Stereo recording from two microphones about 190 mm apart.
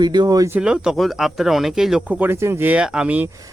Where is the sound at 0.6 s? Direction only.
5° right (ahead or behind).